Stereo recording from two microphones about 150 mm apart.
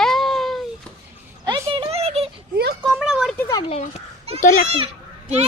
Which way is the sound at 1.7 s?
40° right (ahead or behind).